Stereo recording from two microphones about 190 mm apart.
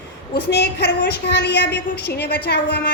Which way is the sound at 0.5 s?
55° left (ahead or behind).